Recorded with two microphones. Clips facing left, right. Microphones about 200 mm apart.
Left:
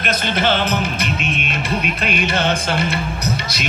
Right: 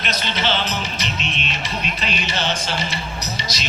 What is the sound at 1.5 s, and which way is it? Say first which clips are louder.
Music: left 5 dB; 55° left (ahead or behind).